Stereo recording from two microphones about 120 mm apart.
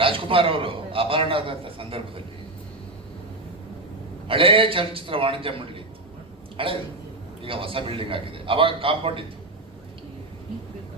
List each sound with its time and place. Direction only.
0.0 s a man's voice: 50° right (ahead or behind)
4.3 s a man's voice: 50° right (ahead or behind)